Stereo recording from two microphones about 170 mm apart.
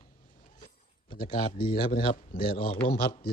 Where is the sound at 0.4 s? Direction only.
55° left (ahead or behind).